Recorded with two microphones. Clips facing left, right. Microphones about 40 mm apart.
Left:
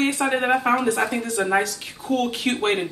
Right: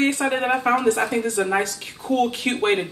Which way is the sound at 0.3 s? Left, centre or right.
Centre.